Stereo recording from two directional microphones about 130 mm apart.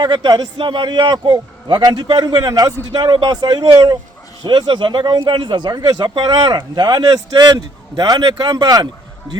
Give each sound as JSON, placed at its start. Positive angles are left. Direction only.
{"t": 0.0, "sound": "a man's voice", "side_deg": -35}